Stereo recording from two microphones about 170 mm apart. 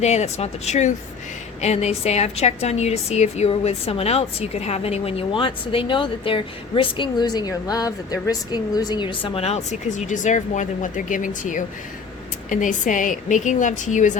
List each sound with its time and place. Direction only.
0.0 s a woman's voice: 40° left (ahead or behind)